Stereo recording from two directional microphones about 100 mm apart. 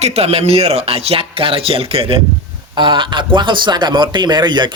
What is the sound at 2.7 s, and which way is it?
A man's voice, 50° right (ahead or behind).